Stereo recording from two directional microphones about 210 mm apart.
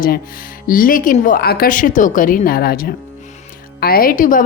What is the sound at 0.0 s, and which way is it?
A woman's voice, 40° left (ahead or behind).